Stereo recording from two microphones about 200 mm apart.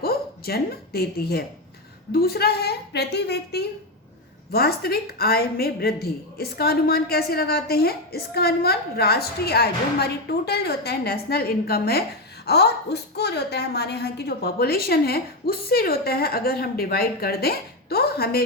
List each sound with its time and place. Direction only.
0.0 s a woman's voice: 50° left (ahead or behind)